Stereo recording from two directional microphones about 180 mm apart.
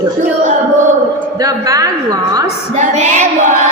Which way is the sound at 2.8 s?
40° right (ahead or behind).